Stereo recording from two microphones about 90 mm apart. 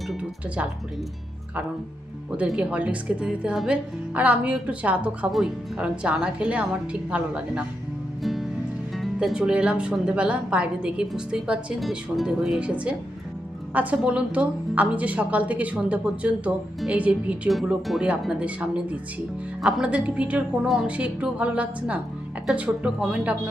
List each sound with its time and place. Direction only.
0.2 s a woman's voice: 15° right (ahead or behind)
2.6 s a woman's voice: 15° right (ahead or behind)
8.2 s music: centre (ahead or behind)
9.1 s a woman's voice: 10° right (ahead or behind)